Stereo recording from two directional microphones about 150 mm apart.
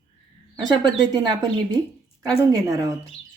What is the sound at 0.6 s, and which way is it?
Speech, 25° right (ahead or behind).